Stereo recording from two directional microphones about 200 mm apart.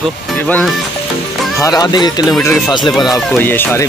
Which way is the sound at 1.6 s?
20° left (ahead or behind).